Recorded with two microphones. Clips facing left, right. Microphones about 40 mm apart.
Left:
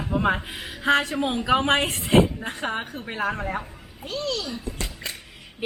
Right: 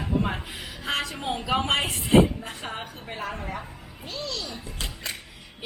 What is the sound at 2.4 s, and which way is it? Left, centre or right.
A woman's voice, left.